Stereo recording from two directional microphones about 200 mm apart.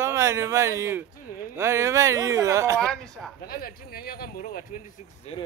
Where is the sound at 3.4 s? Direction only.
45° left (ahead or behind).